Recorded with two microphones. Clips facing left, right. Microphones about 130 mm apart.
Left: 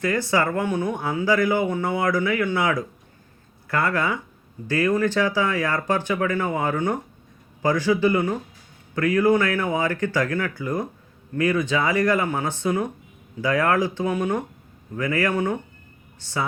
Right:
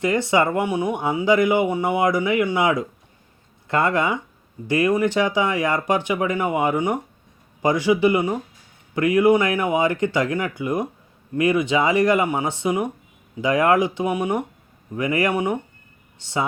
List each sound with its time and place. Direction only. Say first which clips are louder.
0.0 s speech: right 3 dB; 20° right (ahead or behind)